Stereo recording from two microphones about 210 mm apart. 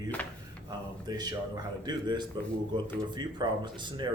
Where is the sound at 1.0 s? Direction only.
20° right (ahead or behind).